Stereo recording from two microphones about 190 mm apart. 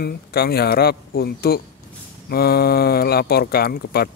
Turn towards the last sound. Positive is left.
turn(degrees=55)  # may be behind; listen again after turning